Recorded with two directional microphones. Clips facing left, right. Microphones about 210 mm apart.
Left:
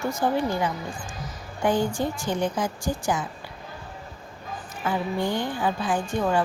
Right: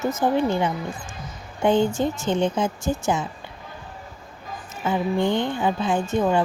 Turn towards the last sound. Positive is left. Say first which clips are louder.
# right 4 dB
turn(degrees=-25)  # may be behind; listen again after turning